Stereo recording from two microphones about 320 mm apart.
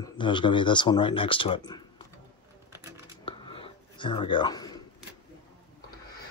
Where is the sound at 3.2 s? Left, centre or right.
Centre.